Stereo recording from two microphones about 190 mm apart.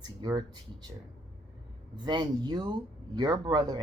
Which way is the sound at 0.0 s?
20° right (ahead or behind).